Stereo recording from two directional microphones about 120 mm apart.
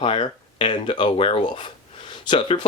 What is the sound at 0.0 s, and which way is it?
Speech, 50° left (ahead or behind).